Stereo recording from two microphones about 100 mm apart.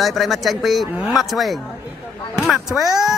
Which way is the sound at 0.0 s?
Centre (ahead or behind).